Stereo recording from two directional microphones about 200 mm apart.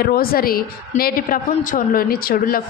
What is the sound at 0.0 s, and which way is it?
A woman's voice, 50° left (ahead or behind).